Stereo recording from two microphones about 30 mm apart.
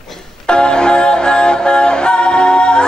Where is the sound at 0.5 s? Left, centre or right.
Left.